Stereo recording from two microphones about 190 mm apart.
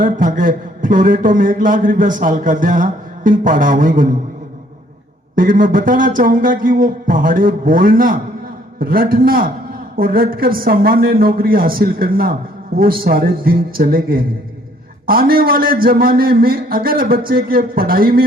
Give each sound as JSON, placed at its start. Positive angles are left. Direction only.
{"t": 0.0, "sound": "a man's voice", "side_deg": -45}
{"t": 5.3, "sound": "a man's voice", "side_deg": -45}